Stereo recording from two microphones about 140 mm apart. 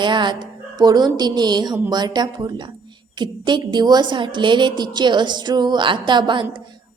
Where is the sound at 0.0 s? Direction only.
35° right (ahead or behind).